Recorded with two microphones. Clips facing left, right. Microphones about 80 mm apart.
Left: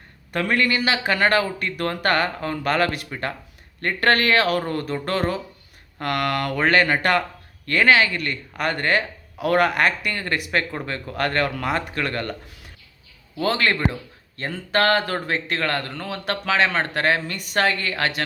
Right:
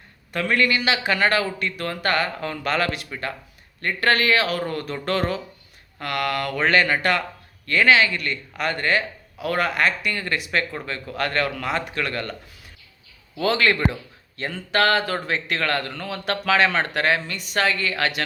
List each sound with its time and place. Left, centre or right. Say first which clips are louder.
0.3 s speech: even; left
2.4 s speech: left 2 dB; left
4.7 s speech: left 1 dB; left
11.9 s speech: left 1 dB; left
13.4 s speech: right 1 dB; left
15.1 s speech: even; left